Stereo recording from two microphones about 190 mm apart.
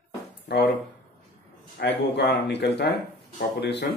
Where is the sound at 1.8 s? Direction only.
65° left (ahead or behind).